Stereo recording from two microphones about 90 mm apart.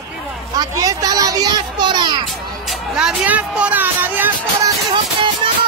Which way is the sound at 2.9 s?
15° right (ahead or behind).